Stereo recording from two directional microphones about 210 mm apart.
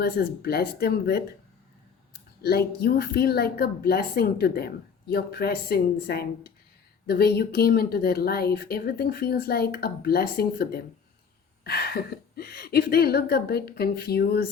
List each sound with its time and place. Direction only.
0.0 s a woman's voice: 45° left (ahead or behind)
2.4 s a woman's voice: 50° left (ahead or behind)